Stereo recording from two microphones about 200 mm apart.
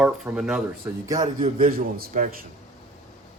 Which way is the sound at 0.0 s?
5° right (ahead or behind).